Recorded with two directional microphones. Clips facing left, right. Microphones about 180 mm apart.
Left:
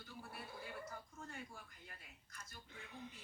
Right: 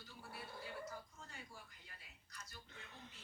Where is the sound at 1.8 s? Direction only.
50° left (ahead or behind).